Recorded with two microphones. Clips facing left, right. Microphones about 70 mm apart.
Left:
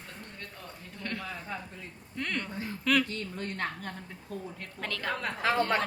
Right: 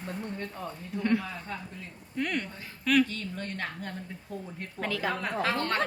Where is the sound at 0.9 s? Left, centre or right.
Centre.